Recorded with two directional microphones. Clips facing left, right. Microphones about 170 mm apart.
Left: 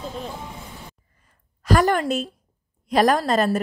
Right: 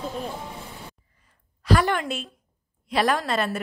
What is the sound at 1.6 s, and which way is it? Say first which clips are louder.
A woman's voice: left 3 dB; 45° left (ahead or behind).